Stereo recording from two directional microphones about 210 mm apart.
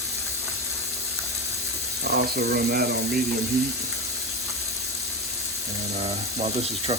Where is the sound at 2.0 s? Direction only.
50° right (ahead or behind).